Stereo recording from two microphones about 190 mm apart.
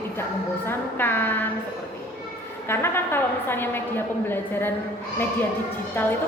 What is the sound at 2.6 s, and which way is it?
A woman's voice, 10° left (ahead or behind).